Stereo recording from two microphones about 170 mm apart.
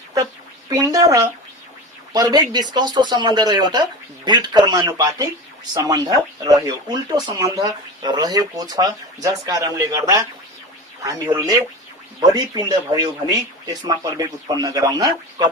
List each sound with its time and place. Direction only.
0.7 s speech: 20° right (ahead or behind)